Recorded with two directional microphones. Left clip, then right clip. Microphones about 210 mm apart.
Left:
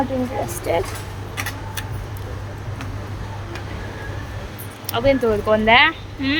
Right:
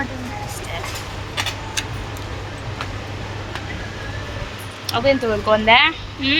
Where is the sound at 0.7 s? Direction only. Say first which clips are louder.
Left 11 dB; 25° left (ahead or behind).